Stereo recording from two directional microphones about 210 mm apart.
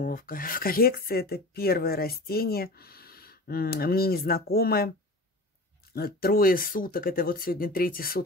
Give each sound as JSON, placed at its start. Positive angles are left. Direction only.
{"t": 0.0, "sound": "speech", "side_deg": 40}
{"t": 5.9, "sound": "speech", "side_deg": 45}